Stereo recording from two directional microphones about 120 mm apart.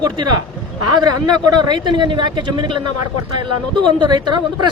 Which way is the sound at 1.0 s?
35° right (ahead or behind).